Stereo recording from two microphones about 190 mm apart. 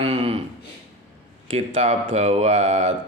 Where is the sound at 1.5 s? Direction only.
35° right (ahead or behind).